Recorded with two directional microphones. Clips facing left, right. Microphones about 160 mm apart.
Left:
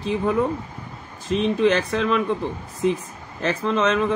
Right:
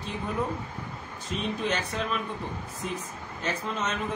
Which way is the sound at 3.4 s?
90° left.